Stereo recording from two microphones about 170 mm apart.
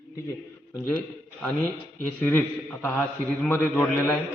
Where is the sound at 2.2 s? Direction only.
10° left (ahead or behind).